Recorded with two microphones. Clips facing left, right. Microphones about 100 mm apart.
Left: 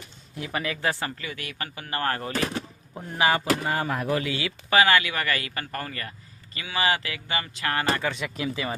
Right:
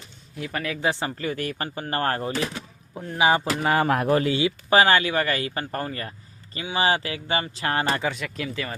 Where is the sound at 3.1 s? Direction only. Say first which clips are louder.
Right 3 dB; 20° right (ahead or behind).